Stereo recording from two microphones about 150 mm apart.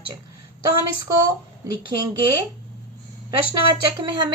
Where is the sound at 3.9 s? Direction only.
30° right (ahead or behind).